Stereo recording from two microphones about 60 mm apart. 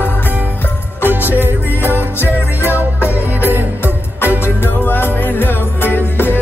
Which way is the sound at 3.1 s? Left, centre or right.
Right.